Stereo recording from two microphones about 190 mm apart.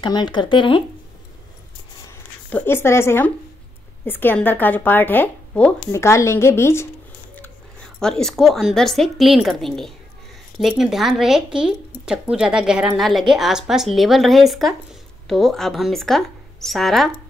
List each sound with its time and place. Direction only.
0.0 s speech: 25° left (ahead or behind)
2.5 s speech: 10° left (ahead or behind)